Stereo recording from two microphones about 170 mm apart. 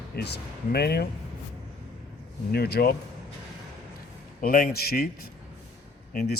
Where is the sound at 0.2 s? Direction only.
70° left (ahead or behind).